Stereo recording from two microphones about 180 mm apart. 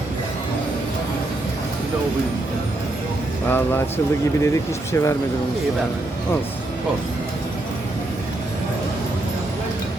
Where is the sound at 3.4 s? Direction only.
10° left (ahead or behind).